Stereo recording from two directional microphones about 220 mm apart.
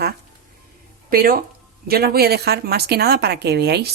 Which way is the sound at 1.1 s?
40° right (ahead or behind).